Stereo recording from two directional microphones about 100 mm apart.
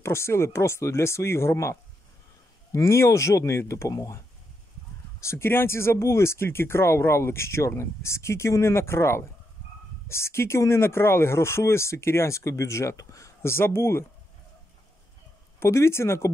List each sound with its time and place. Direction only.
0.0 s speech: 25° left (ahead or behind)
5.2 s speech: 25° left (ahead or behind)
15.6 s speech: 25° left (ahead or behind)